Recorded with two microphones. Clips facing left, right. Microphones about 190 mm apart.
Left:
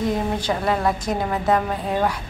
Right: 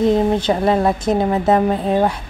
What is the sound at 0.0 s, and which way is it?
A woman's voice, 25° right (ahead or behind).